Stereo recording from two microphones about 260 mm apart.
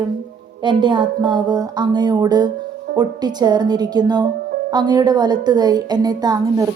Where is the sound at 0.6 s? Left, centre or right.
Centre.